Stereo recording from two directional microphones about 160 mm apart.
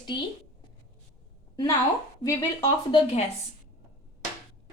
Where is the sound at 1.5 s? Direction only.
25° left (ahead or behind).